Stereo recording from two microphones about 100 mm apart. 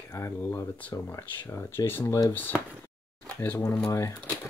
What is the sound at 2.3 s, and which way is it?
Speech, 20° left (ahead or behind).